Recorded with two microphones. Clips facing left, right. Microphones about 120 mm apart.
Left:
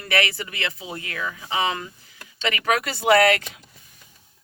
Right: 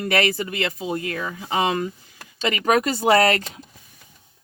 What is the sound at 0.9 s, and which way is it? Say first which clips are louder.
Speech: right 5 dB; 30° right (ahead or behind).